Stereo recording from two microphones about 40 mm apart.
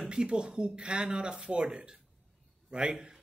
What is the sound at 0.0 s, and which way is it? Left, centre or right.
A man's voice, right.